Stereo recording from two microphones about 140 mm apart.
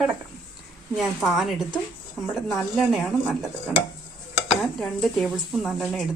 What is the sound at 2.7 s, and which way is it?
Speech, centre (ahead or behind).